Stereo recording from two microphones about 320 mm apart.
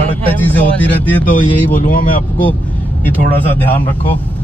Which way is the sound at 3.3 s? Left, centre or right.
Centre.